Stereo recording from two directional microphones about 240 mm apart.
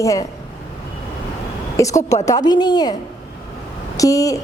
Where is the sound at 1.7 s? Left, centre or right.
Centre.